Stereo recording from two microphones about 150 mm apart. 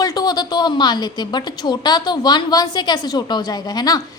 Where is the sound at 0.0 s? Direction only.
25° left (ahead or behind).